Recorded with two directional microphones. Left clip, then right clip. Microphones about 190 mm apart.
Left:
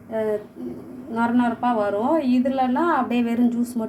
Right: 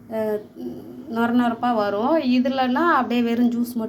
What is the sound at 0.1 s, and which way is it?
A woman's voice, 10° right (ahead or behind).